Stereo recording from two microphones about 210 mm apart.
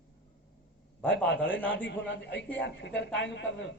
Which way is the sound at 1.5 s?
10° left (ahead or behind).